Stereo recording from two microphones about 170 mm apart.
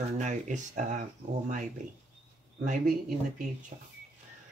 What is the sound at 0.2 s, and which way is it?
Speech, 45° right (ahead or behind).